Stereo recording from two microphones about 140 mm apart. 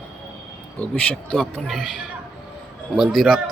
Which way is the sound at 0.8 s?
10° left (ahead or behind).